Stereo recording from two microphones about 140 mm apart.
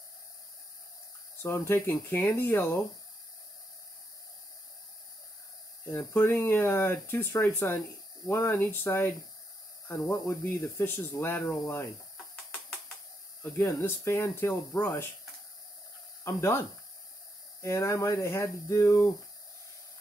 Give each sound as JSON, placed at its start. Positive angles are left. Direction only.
{"t": 1.4, "sound": "speech", "side_deg": 15}
{"t": 5.9, "sound": "speech", "side_deg": 20}
{"t": 12.4, "sound": "a sound", "side_deg": 5}
{"t": 13.4, "sound": "speech", "side_deg": 15}
{"t": 16.3, "sound": "speech", "side_deg": 20}